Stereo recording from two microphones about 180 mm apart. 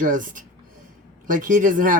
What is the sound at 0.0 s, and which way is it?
Speech, 50° right (ahead or behind).